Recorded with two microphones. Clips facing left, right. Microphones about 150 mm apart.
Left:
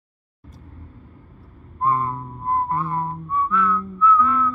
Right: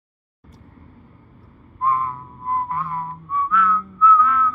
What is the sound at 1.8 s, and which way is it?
Whistling, 30° left (ahead or behind).